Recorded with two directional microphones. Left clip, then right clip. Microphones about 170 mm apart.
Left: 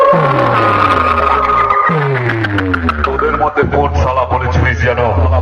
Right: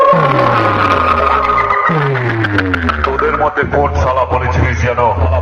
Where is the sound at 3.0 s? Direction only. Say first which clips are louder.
Even; 25° left (ahead or behind).